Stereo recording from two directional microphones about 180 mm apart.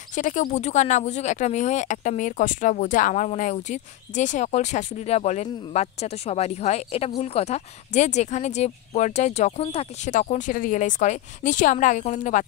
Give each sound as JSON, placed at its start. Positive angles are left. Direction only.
{"t": 0.1, "sound": "speech", "side_deg": 45}